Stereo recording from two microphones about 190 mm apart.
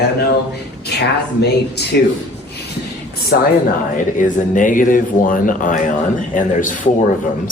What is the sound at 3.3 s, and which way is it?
Speech, 55° left (ahead or behind).